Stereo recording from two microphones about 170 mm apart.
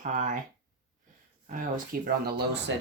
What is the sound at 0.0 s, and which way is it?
Speech, 50° right (ahead or behind).